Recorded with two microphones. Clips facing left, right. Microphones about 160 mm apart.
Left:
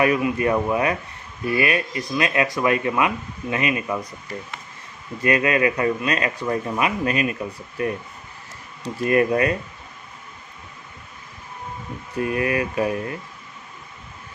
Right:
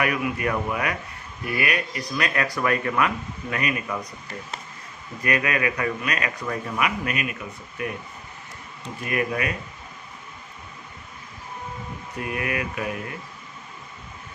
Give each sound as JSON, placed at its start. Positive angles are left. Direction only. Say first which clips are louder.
{"t": 0.0, "sound": "a man's voice", "louder": "left 5 dB", "side_deg": 25}
{"t": 5.2, "sound": "a man's voice", "louder": "left 5 dB", "side_deg": 25}
{"t": 12.1, "sound": "speech", "louder": "left 6 dB", "side_deg": 30}